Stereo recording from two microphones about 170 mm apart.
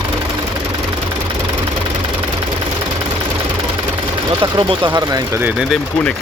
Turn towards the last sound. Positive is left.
turn(degrees=-20)  # may be behind; listen again after turning